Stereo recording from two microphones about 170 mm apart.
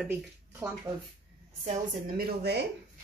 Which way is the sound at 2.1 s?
75° right (ahead or behind).